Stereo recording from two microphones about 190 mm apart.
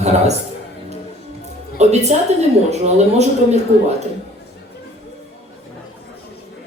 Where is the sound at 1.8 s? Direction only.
35° right (ahead or behind).